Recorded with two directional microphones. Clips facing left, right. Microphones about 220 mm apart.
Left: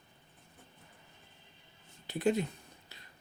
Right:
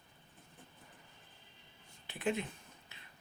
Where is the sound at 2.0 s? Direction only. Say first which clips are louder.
Left 6 dB; 40° left (ahead or behind).